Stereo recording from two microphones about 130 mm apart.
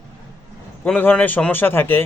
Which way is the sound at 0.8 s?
15° left (ahead or behind).